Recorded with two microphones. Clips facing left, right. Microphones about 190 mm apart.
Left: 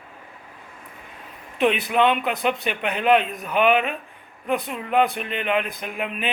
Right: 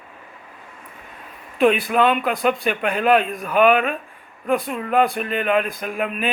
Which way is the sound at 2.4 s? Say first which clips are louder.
Right 4 dB; 40° right (ahead or behind).